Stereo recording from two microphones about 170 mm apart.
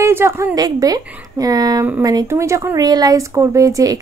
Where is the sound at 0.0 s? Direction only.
15° right (ahead or behind).